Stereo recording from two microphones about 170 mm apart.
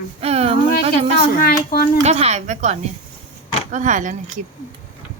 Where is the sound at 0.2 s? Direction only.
35° right (ahead or behind).